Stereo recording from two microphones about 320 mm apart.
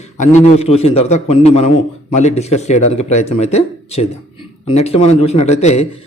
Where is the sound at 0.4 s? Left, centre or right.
Centre.